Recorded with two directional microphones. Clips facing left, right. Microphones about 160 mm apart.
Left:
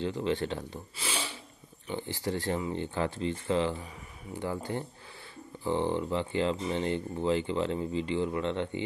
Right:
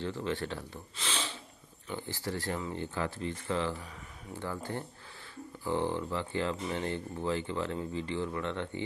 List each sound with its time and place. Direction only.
0.0 s speech: 20° left (ahead or behind)
0.9 s a sound: 10° left (ahead or behind)
1.9 s speech: 20° left (ahead or behind)